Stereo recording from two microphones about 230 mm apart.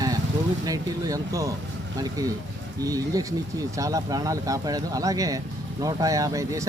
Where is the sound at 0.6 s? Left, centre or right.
Centre.